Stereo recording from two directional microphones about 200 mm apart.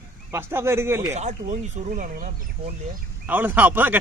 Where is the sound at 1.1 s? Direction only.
35° right (ahead or behind).